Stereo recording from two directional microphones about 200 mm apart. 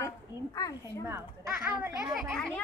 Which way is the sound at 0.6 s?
15° left (ahead or behind).